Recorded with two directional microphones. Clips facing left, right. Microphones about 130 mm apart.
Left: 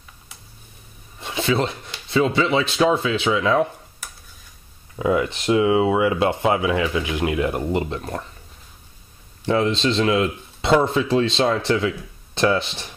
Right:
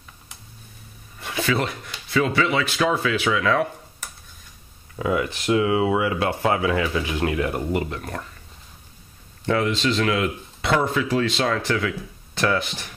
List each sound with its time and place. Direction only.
1.2 s speech: 25° left (ahead or behind)
4.9 s speech: 20° left (ahead or behind)
9.5 s speech: 25° left (ahead or behind)